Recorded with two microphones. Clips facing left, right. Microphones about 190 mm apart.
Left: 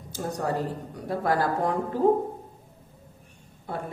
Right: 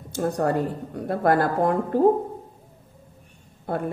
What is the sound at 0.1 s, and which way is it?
A woman's voice, 55° right (ahead or behind).